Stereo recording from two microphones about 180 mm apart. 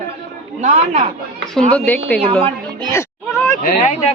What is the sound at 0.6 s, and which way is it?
Speech, 40° right (ahead or behind).